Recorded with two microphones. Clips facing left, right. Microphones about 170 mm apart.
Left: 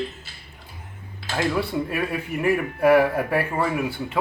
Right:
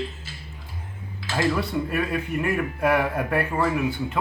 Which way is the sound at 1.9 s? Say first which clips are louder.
Right 1 dB; 5° left (ahead or behind).